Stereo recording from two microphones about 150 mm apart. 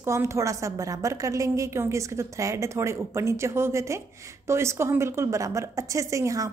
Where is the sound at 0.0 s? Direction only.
20° right (ahead or behind).